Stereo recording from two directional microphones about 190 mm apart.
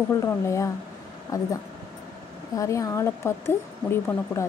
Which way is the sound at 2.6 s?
15° left (ahead or behind).